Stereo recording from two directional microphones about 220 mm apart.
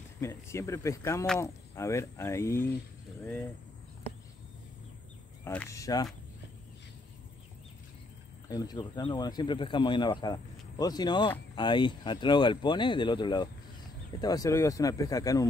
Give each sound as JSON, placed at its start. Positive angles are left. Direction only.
{"t": 0.2, "sound": "speech", "side_deg": 10}
{"t": 5.4, "sound": "speech", "side_deg": 10}
{"t": 8.5, "sound": "speech", "side_deg": 15}